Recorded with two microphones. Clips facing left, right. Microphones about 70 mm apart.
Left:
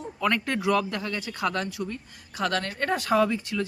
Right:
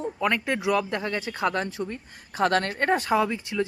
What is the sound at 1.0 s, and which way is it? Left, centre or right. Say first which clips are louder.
Speech: right 2 dB; right.